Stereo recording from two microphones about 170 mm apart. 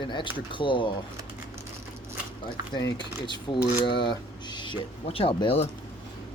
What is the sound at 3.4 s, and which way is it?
Speech, 25° left (ahead or behind).